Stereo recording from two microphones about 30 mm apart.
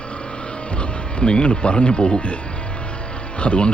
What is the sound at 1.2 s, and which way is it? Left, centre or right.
Speech, left.